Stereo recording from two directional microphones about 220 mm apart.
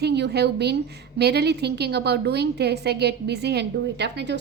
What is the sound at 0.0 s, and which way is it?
A woman's voice, 50° right (ahead or behind).